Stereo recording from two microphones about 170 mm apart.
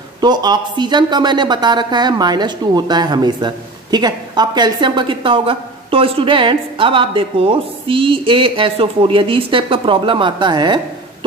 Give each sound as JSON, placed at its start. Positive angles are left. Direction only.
{"t": 0.2, "sound": "a woman's voice", "side_deg": -25}